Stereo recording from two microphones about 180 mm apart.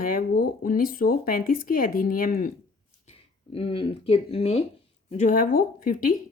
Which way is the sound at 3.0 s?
30° left (ahead or behind).